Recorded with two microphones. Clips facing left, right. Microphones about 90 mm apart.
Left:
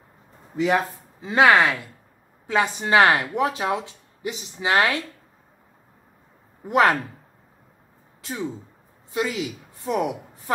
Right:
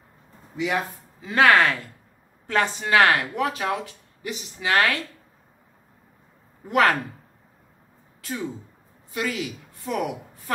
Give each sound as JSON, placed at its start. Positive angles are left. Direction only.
{"t": 0.6, "sound": "speech", "side_deg": 40}
{"t": 1.2, "sound": "a woman's voice", "side_deg": 20}
{"t": 2.8, "sound": "speech", "side_deg": 25}
{"t": 6.7, "sound": "speech", "side_deg": 20}
{"t": 8.2, "sound": "a woman's voice", "side_deg": 25}